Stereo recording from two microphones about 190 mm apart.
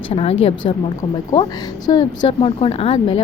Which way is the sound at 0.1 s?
30° left (ahead or behind).